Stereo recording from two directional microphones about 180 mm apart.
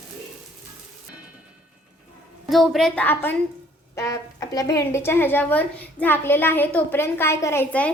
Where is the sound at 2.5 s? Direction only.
Centre (ahead or behind).